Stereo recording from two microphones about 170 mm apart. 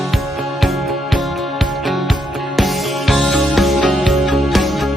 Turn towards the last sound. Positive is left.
turn(degrees=0)  # may be behind; listen again after turning